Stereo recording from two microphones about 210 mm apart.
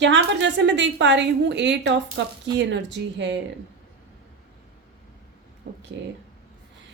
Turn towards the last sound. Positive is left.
turn(degrees=-55)  # may be behind; listen again after turning